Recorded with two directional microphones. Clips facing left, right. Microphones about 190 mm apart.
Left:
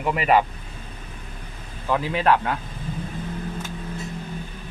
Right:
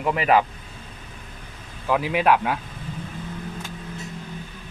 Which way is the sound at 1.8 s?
10° right (ahead or behind).